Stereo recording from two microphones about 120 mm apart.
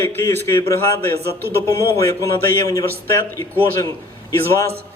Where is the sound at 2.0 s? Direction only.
25° left (ahead or behind).